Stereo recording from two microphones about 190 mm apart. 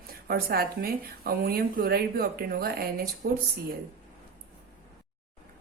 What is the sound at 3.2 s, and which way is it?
Speech, 65° right (ahead or behind).